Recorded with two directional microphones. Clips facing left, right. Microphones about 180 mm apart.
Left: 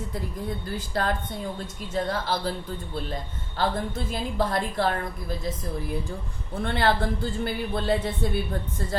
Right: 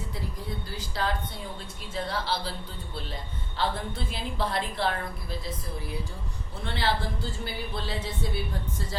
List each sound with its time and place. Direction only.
0.8 s speech: 50° left (ahead or behind)
6.5 s speech: 55° left (ahead or behind)